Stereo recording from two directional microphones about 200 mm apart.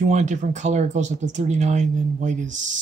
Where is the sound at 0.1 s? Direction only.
35° right (ahead or behind).